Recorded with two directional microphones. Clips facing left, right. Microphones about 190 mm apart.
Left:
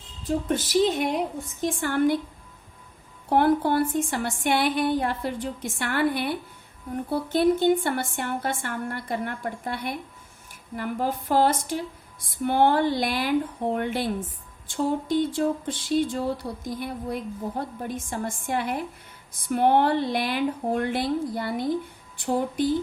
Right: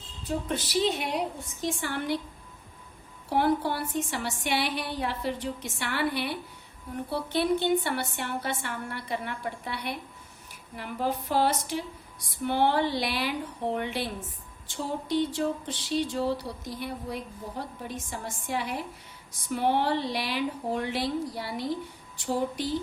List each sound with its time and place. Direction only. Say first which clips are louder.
0.3 s a woman's voice: left 5 dB; 50° left (ahead or behind)
3.2 s a woman's voice: left 5 dB; 55° left (ahead or behind)